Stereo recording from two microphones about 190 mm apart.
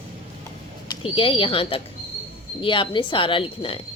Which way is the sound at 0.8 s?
30° left (ahead or behind).